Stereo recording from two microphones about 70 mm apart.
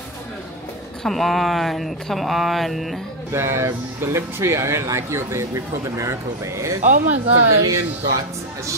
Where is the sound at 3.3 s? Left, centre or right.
Right.